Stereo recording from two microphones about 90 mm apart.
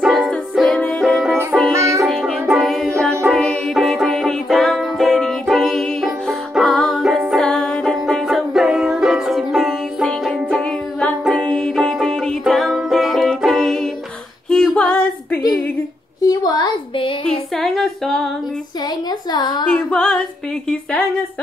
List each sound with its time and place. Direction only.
0.1 s music: 5° left (ahead or behind)
1.8 s music: 35° right (ahead or behind)
2.6 s music: centre (ahead or behind)
14.5 s female singing: 5° left (ahead or behind)
16.2 s a sound: 45° left (ahead or behind)
17.3 s female singing: 5° left (ahead or behind)
19.3 s a sound: 50° left (ahead or behind)
19.7 s female singing: 10° left (ahead or behind)